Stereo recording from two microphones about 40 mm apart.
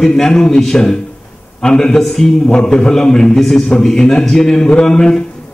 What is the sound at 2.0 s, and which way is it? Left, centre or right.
Speech, centre.